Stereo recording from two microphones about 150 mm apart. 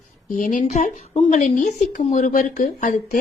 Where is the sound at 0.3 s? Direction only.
60° left (ahead or behind).